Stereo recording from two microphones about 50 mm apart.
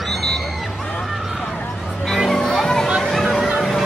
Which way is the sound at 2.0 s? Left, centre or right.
Centre.